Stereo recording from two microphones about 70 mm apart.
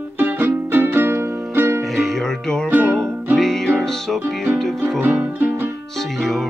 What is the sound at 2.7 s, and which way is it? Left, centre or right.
Music, right.